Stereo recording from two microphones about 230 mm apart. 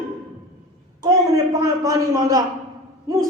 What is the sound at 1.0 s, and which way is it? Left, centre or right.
A man's voice, centre.